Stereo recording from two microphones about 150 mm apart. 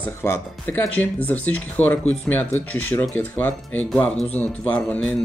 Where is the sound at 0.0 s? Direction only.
15° left (ahead or behind).